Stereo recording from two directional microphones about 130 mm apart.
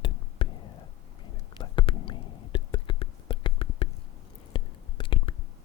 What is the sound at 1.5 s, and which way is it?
Whispering, 40° left (ahead or behind).